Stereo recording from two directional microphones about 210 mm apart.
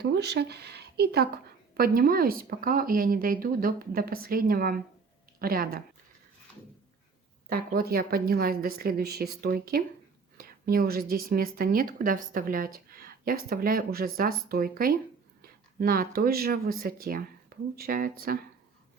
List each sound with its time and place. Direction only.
0.0 s speech: 50° right (ahead or behind)
7.5 s speech: 45° right (ahead or behind)